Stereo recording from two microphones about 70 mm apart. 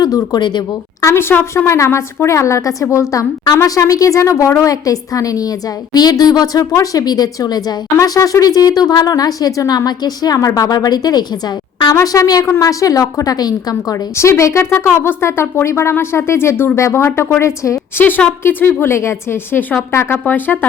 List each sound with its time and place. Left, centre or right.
0.0 s speech: left
1.0 s a woman's voice: left
8.0 s speech: left
12.0 s speech: left
13.9 s a woman's voice: left
17.9 s a woman's voice: left
19.9 s a woman's voice: left
20.2 s speech: left